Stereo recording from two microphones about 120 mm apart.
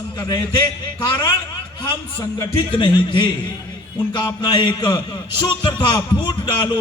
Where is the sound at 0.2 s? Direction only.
35° left (ahead or behind).